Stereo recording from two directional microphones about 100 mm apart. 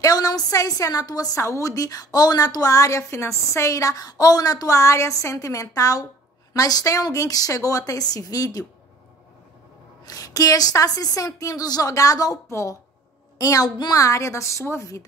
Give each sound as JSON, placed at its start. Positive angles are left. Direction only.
{"t": 0.0, "sound": "a woman's voice", "side_deg": 40}
{"t": 10.0, "sound": "a woman's voice", "side_deg": 35}